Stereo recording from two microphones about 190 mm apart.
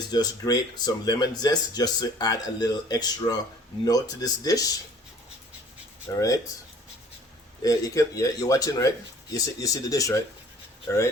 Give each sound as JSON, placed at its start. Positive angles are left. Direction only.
{"t": 0.1, "sound": "speech", "side_deg": 20}
{"t": 6.1, "sound": "speech", "side_deg": 20}
{"t": 7.6, "sound": "a man's voice", "side_deg": 20}